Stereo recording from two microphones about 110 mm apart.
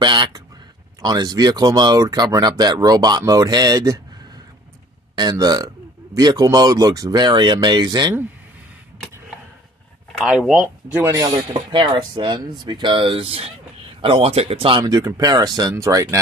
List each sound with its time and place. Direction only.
0.0 s a sound: 45° right (ahead or behind)
1.0 s speech: 40° right (ahead or behind)
5.1 s speech: 40° right (ahead or behind)
10.2 s speech: 5° right (ahead or behind)
11.1 s speech: 35° right (ahead or behind)
11.7 s speech: 50° right (ahead or behind)
14.8 s speech: 35° right (ahead or behind)